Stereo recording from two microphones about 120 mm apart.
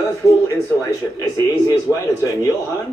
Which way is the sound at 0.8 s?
30° left (ahead or behind).